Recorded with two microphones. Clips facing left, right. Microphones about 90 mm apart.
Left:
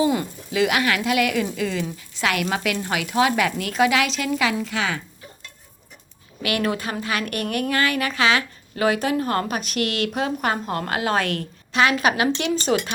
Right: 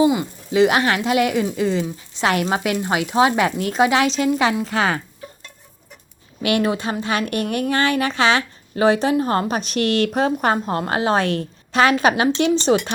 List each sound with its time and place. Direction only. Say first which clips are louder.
0.0 s speech: right 4 dB; 5° right (ahead or behind)
0.5 s a woman's voice: right 5 dB; 30° right (ahead or behind)
4.6 s speech: right 5 dB; 40° right (ahead or behind)
6.4 s a woman's voice: right 4 dB; 25° right (ahead or behind)